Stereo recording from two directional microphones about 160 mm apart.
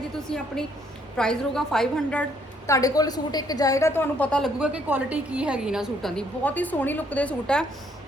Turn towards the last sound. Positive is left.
turn(degrees=5)  # may be behind; listen again after turning